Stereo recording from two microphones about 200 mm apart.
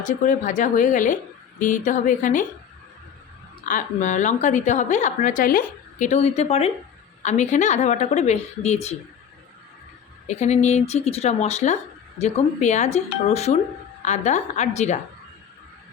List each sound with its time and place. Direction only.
0.0 s a woman's voice: 40° left (ahead or behind)
3.7 s a woman's voice: 40° left (ahead or behind)
10.2 s a woman's voice: 35° left (ahead or behind)